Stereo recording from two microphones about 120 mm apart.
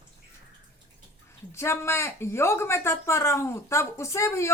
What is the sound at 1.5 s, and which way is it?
Speech, 20° left (ahead or behind).